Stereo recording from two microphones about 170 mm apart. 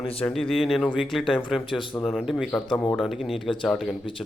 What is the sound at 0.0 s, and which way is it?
Speech, 35° left (ahead or behind).